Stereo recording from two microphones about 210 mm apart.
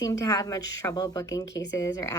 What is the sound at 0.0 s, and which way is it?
A woman's voice, 15° left (ahead or behind).